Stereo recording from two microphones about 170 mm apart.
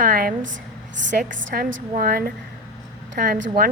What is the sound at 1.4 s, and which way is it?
Speech, 90° right.